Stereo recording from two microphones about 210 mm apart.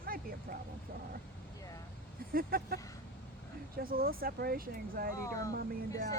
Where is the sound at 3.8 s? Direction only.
45° right (ahead or behind).